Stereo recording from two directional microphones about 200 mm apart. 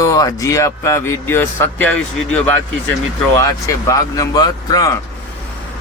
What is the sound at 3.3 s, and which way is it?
A man's voice, 15° left (ahead or behind).